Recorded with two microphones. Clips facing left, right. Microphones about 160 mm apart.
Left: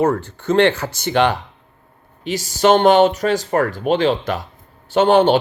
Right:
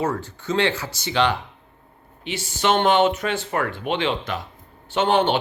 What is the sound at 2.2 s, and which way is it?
Speech, 40° left (ahead or behind).